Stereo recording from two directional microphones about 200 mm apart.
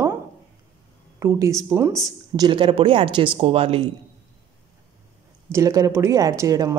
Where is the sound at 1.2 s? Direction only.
15° right (ahead or behind).